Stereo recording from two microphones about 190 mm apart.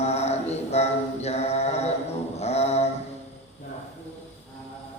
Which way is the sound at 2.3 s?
35° left (ahead or behind).